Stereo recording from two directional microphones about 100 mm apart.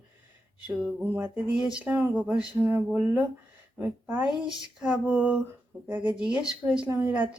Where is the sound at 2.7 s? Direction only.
25° right (ahead or behind).